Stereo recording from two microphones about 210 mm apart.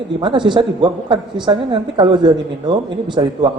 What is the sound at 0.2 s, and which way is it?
A man's voice, 20° right (ahead or behind).